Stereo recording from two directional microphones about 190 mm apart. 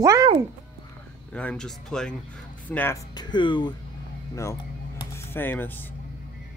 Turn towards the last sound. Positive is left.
turn(degrees=10)  # may be behind; listen again after turning